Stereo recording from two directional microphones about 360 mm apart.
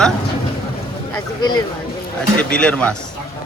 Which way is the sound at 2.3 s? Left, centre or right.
Centre.